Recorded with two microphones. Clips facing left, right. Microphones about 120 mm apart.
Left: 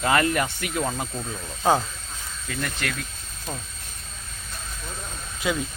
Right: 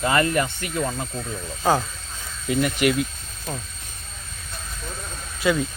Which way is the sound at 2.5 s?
15° right (ahead or behind).